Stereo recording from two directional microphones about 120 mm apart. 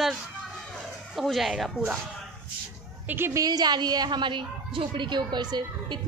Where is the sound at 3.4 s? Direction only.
35° right (ahead or behind).